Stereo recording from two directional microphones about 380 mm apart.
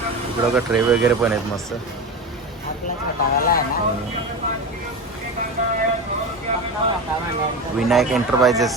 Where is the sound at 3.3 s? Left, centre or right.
Left.